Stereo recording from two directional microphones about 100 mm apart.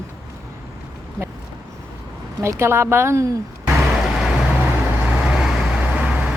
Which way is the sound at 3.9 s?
5° right (ahead or behind).